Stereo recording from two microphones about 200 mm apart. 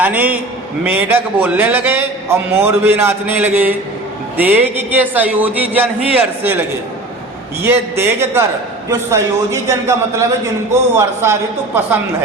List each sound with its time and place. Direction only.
0.0 s a man's voice: 10° right (ahead or behind)